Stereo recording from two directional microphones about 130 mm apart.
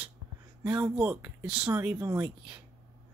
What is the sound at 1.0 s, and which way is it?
Speech, 15° right (ahead or behind).